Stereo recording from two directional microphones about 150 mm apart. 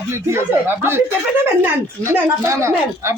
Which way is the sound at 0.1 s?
15° right (ahead or behind).